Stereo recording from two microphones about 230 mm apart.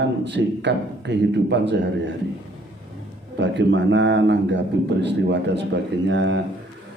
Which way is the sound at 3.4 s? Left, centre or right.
Right.